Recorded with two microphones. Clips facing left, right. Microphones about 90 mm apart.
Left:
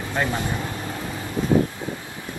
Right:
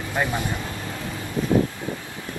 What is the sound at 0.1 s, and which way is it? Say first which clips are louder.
Speech: even; 15° right (ahead or behind).